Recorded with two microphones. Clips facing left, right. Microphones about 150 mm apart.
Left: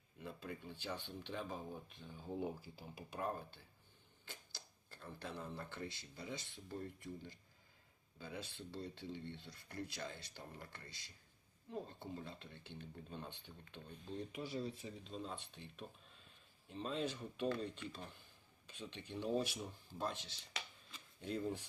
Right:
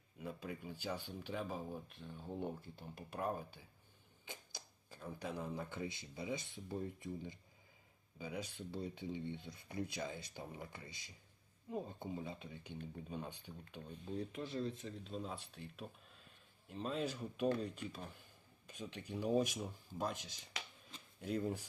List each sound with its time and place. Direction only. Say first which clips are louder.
0.2 s speech: right 3 dB; 10° right (ahead or behind)